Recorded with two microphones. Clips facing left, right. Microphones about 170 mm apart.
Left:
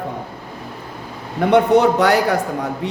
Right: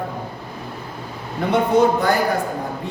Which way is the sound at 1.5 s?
85° left.